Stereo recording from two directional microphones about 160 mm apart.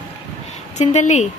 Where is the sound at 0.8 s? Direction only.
45° left (ahead or behind).